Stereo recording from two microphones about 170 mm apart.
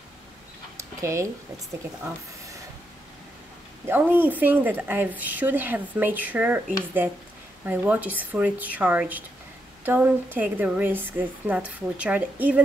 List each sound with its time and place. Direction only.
0.7 s dog: 15° right (ahead or behind)
3.8 s speech: 10° right (ahead or behind)
7.6 s speech: 10° right (ahead or behind)